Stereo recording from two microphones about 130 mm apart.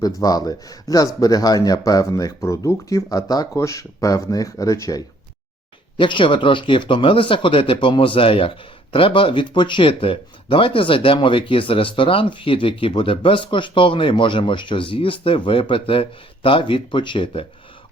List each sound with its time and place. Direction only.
0.2 s speech: 30° left (ahead or behind)
6.0 s speech: 40° left (ahead or behind)